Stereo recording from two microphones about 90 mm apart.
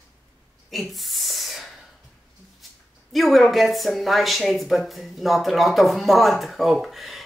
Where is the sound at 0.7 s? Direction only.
Centre (ahead or behind).